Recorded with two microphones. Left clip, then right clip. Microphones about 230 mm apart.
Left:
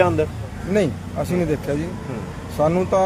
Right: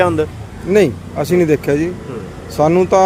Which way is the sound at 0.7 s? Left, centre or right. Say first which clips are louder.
Right 8 dB; right.